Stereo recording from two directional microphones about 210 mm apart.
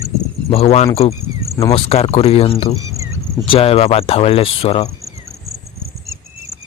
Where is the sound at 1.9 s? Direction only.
30° left (ahead or behind).